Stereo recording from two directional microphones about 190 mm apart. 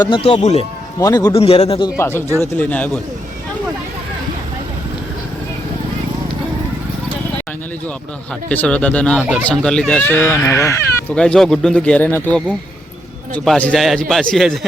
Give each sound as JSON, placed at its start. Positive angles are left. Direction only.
{"t": 0.0, "sound": "speech", "side_deg": 30}
{"t": 0.9, "sound": "speech", "side_deg": 20}
{"t": 1.3, "sound": "a man's voice", "side_deg": 30}
{"t": 2.0, "sound": "speech", "side_deg": 10}
{"t": 8.4, "sound": "speech", "side_deg": 5}
{"t": 11.2, "sound": "a man's voice", "side_deg": 5}